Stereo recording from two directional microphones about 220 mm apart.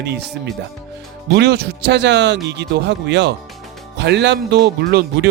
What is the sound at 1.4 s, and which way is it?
A man's voice, 50° right (ahead or behind).